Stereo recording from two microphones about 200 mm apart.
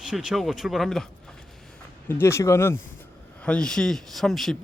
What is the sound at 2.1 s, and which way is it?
Speech, 10° left (ahead or behind).